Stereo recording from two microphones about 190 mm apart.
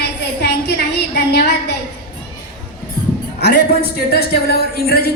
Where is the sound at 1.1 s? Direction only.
60° left (ahead or behind).